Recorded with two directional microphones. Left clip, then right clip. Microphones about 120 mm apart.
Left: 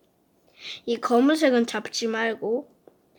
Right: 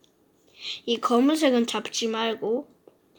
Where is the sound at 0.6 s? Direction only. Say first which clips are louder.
Right 1 dB; 20° left (ahead or behind).